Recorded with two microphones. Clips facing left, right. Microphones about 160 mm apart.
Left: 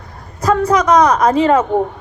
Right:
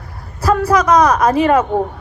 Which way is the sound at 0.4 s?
20° left (ahead or behind).